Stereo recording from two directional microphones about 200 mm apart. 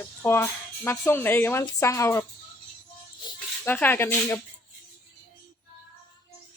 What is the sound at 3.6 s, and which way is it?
Speech, 10° left (ahead or behind).